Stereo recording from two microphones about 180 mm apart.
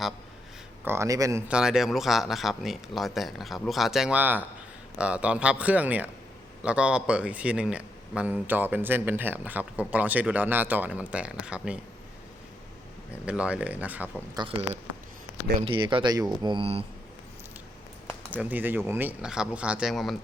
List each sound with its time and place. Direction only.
0.9 s speech: 15° right (ahead or behind)
1.5 s speech: 5° right (ahead or behind)
13.2 s speech: 5° right (ahead or behind)
14.3 s speech: 30° right (ahead or behind)
18.3 s speech: 10° right (ahead or behind)